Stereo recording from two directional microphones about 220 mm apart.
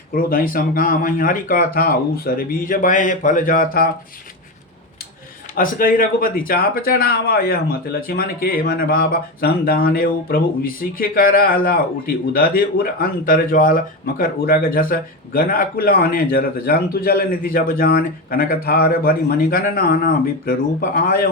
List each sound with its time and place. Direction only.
0.1 s speech: 40° left (ahead or behind)
5.5 s speech: 40° left (ahead or behind)